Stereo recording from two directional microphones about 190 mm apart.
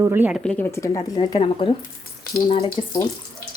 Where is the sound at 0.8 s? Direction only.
20° left (ahead or behind).